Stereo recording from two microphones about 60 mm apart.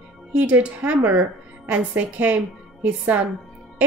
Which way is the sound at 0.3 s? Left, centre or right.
Right.